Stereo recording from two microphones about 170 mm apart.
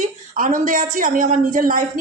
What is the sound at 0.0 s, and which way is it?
A woman's voice, 50° right (ahead or behind).